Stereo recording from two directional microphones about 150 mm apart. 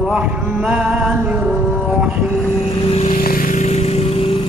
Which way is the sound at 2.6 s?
40° left (ahead or behind).